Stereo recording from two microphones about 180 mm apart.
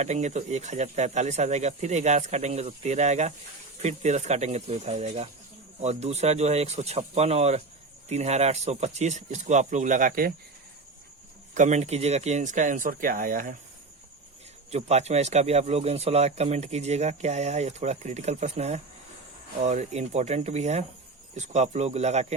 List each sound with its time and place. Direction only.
0.0 s speech: 40° right (ahead or behind)
11.5 s speech: 40° right (ahead or behind)
14.7 s speech: 35° right (ahead or behind)